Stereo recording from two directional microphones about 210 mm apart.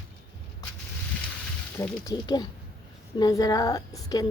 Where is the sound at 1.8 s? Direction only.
15° left (ahead or behind).